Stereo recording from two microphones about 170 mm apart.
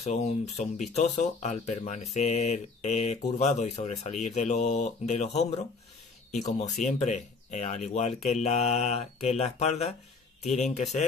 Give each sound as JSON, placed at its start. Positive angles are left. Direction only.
{"t": 0.0, "sound": "speech", "side_deg": 40}